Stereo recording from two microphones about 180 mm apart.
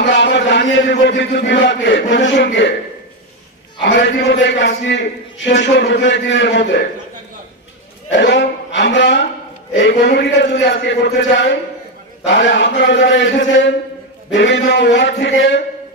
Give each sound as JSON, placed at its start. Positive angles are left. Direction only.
{"t": 0.0, "sound": "a man's voice", "side_deg": 80}
{"t": 3.8, "sound": "a man's voice", "side_deg": 80}
{"t": 8.1, "sound": "a man's voice", "side_deg": 80}
{"t": 9.8, "sound": "a man's voice", "side_deg": 75}